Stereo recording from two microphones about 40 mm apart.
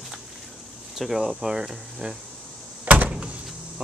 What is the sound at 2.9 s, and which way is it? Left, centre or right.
Door, right.